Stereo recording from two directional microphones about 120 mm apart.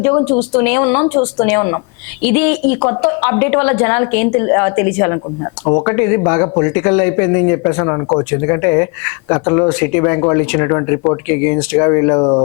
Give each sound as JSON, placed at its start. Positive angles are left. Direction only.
{"t": 0.0, "sound": "speech", "side_deg": 25}